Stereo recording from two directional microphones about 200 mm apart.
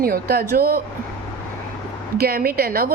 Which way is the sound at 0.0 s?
50° right (ahead or behind).